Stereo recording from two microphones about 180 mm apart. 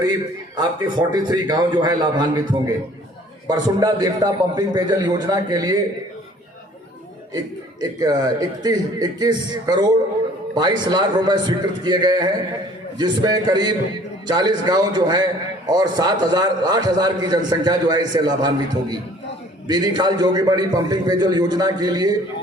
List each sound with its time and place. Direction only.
0.0 s a man's voice: 20° right (ahead or behind)
7.8 s a man's voice: 20° right (ahead or behind)